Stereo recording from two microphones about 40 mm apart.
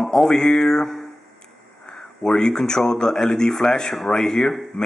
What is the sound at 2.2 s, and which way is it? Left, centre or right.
Speech, centre.